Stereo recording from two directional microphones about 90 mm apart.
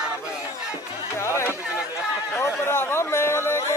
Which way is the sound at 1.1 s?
30° left (ahead or behind).